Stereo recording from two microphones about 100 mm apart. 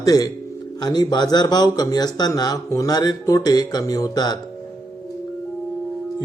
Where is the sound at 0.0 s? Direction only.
40° left (ahead or behind).